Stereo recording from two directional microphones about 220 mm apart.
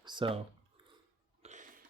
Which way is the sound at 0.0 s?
20° right (ahead or behind).